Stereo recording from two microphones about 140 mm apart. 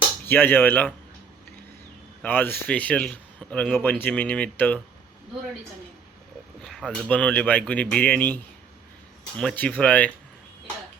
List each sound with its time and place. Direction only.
0.3 s speech: 15° left (ahead or behind)
2.2 s speech: 15° left (ahead or behind)
6.6 s a sound: centre (ahead or behind)
7.1 s speech: 10° left (ahead or behind)
9.4 s speech: 5° left (ahead or behind)